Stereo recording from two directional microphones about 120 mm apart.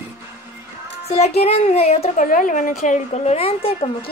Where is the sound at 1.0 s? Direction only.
60° left (ahead or behind).